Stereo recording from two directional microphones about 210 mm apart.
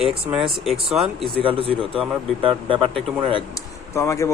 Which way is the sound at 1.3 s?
25° right (ahead or behind).